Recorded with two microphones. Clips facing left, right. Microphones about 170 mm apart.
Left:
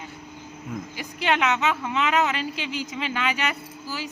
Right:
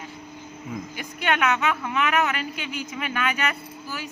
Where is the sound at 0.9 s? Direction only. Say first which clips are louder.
Left 1 dB; 20° left (ahead or behind).